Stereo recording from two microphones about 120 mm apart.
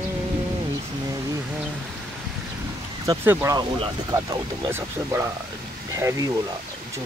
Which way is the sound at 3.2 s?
20° right (ahead or behind).